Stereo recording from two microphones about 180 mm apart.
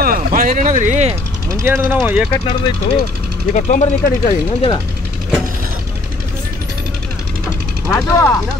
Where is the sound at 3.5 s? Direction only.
40° left (ahead or behind).